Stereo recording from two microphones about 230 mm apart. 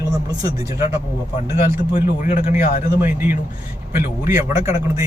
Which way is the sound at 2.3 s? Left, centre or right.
Left.